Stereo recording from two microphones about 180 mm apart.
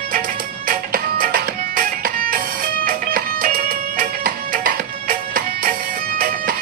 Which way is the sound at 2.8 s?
50° right (ahead or behind).